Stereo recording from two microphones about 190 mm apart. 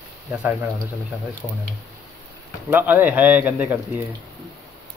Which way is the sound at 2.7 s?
10° right (ahead or behind).